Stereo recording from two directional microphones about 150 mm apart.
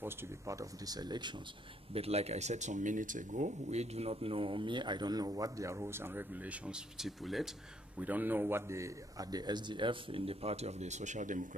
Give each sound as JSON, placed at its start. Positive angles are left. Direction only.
{"t": 0.0, "sound": "speech", "side_deg": -20}
{"t": 2.0, "sound": "speech", "side_deg": -45}
{"t": 8.0, "sound": "speech", "side_deg": -10}